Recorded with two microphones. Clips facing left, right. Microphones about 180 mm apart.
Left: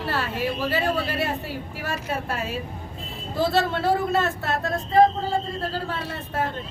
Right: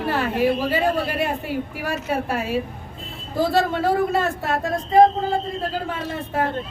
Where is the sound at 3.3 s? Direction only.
15° right (ahead or behind).